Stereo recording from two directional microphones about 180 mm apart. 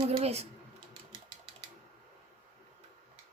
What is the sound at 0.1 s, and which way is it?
Speech, 35° right (ahead or behind).